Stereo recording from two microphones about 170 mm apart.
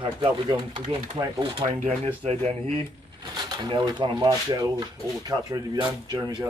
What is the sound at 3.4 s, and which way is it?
Speech, 25° right (ahead or behind).